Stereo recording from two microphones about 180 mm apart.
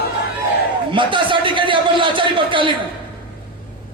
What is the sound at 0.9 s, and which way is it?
A man's voice, 25° right (ahead or behind).